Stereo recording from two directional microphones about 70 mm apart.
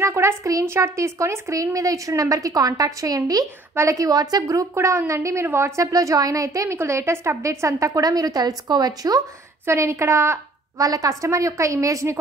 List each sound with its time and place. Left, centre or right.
0.0 s a woman's voice: right
3.7 s a woman's voice: right
4.0 s a woman's voice: right
4.7 s a woman's voice: right
5.8 s a woman's voice: right
9.7 s a woman's voice: right
10.9 s a woman's voice: right